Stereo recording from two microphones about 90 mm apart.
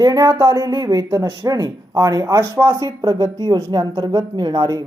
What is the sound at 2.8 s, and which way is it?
Speech, 40° right (ahead or behind).